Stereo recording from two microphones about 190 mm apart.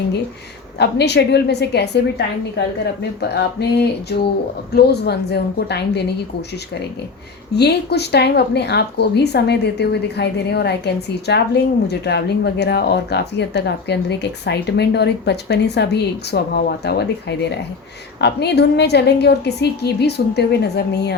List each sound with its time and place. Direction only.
0.8 s speech: 60° left (ahead or behind)
7.5 s speech: 60° left (ahead or behind)